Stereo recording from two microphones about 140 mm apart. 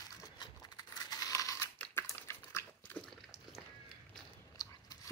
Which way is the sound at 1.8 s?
15° left (ahead or behind).